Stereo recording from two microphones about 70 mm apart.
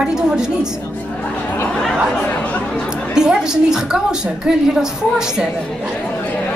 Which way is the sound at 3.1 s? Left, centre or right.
Centre.